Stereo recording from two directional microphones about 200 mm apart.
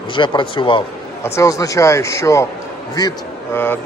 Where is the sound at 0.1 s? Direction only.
25° left (ahead or behind).